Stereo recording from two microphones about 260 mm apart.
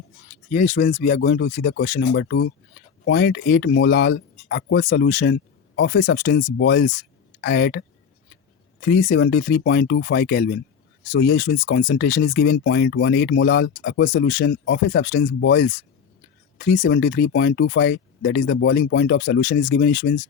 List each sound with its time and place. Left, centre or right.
0.5 s speech: left
6.1 s speech: left
11.6 s speech: left
11.9 s speech: left
14.3 s speech: left